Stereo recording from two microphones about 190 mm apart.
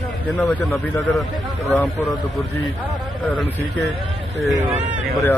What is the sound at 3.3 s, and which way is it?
Speech, 10° left (ahead or behind).